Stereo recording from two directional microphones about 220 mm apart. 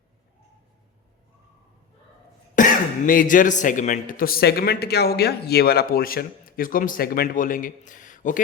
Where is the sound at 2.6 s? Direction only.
35° left (ahead or behind).